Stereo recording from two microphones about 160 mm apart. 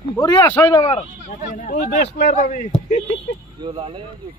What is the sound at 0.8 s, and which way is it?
Speech, 45° left (ahead or behind).